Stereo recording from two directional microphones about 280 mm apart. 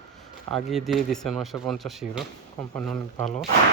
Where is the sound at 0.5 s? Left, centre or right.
Centre.